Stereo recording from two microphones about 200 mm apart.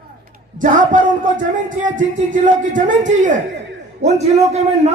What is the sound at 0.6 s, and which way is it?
Speech, 40° right (ahead or behind).